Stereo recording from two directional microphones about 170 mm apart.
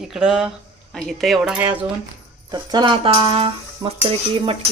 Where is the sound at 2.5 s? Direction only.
25° right (ahead or behind).